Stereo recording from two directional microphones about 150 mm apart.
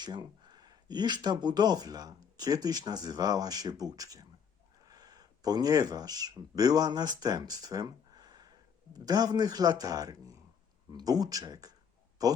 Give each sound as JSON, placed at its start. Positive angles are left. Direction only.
{"t": 0.0, "sound": "speech", "side_deg": -30}